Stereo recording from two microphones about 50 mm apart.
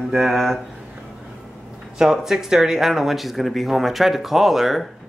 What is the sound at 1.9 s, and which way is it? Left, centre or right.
Speech, centre.